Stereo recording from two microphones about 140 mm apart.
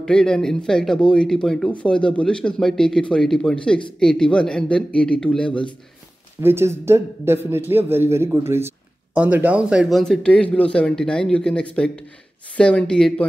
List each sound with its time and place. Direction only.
0.0 s a man's voice: 5° left (ahead or behind)
6.4 s a man's voice: 20° right (ahead or behind); by 13.3 s 5° left (ahead or behind)